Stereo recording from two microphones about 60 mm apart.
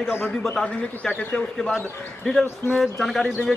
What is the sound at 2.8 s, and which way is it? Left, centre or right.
Speech, centre.